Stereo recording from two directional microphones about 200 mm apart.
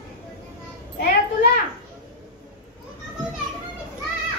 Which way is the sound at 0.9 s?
55° left (ahead or behind).